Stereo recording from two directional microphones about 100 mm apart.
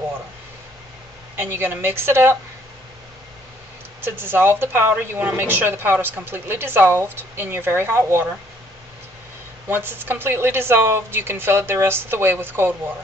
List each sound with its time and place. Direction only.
1.3 s a woman's voice: 20° right (ahead or behind)
4.0 s a woman's voice: 20° right (ahead or behind)
9.7 s a woman's voice: 20° right (ahead or behind)